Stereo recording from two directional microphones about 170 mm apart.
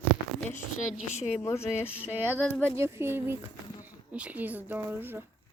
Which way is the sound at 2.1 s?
10° right (ahead or behind).